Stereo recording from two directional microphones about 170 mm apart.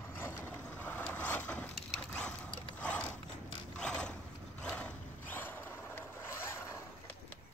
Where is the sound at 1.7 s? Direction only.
5° left (ahead or behind).